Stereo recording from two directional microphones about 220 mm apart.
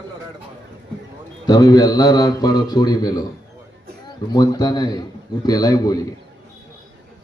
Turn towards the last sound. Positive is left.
turn(degrees=15)  # may be behind; listen again after turning